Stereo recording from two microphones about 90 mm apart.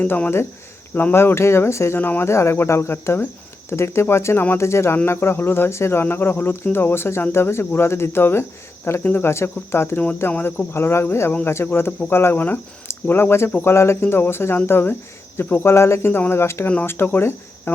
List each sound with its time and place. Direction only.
0.0 s speech: 20° left (ahead or behind)